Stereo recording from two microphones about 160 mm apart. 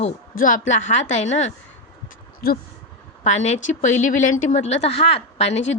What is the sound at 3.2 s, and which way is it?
A woman's voice, 45° left (ahead or behind).